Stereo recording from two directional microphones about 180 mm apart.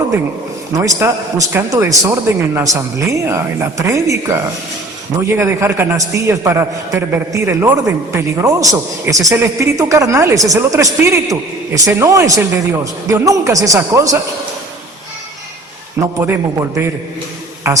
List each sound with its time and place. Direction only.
0.8 s a man's voice: 15° right (ahead or behind)
5.4 s a man's voice: 15° right (ahead or behind)
16.2 s a man's voice: 15° right (ahead or behind)